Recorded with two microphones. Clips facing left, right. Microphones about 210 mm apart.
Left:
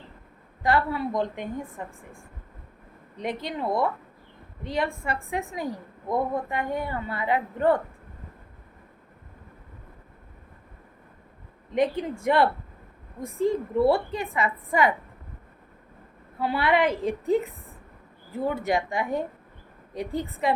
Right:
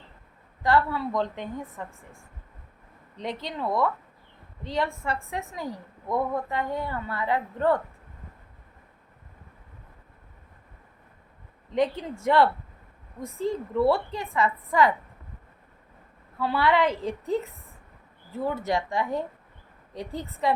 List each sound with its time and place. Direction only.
0.7 s a woman's voice: 20° left (ahead or behind)
3.2 s a woman's voice: 15° left (ahead or behind)
11.7 s a woman's voice: 15° left (ahead or behind)
13.5 s a woman's voice: 15° left (ahead or behind)
16.4 s a woman's voice: 15° left (ahead or behind)